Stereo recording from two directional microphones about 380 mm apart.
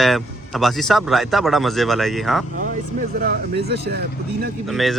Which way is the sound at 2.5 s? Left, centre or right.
Right.